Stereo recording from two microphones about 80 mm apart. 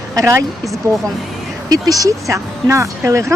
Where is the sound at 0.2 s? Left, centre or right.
Right.